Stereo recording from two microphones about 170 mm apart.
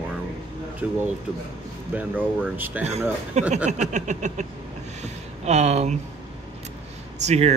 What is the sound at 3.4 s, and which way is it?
Speech, 40° right (ahead or behind).